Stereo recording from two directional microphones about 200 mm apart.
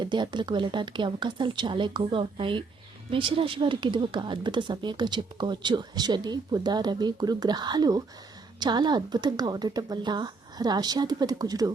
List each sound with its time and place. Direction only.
0.0 s speech: 20° right (ahead or behind)